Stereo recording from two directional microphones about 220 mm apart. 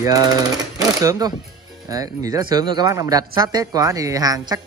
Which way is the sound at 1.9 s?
15° right (ahead or behind).